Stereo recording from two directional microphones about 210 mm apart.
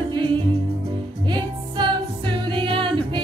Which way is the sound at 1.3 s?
20° right (ahead or behind).